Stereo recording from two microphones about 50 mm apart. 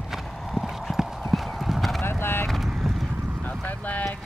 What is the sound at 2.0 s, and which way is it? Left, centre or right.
Clip-clop, left.